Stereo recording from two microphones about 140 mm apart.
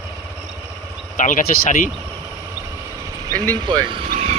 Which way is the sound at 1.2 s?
70° left (ahead or behind).